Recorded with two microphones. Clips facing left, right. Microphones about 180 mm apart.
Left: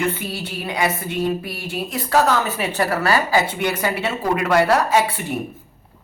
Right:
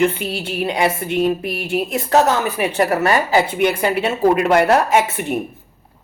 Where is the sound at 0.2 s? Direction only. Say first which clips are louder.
Right 6 dB; 25° right (ahead or behind).